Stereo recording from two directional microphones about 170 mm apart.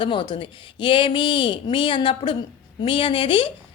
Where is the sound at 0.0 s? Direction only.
30° left (ahead or behind).